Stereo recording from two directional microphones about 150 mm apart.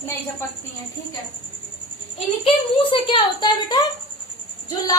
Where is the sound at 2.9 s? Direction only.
35° left (ahead or behind).